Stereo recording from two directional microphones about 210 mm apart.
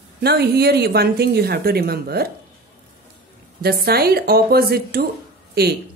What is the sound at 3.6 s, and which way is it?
Speech, 50° right (ahead or behind).